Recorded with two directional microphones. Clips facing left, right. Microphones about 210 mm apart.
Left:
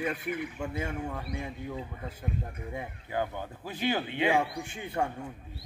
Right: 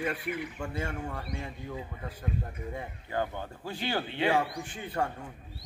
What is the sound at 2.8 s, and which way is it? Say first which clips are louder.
A man's voice: left 1 dB; 10° left (ahead or behind).